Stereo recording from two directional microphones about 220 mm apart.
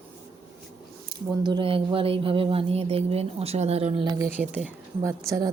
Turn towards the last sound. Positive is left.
turn(degrees=-15)  # may be behind; listen again after turning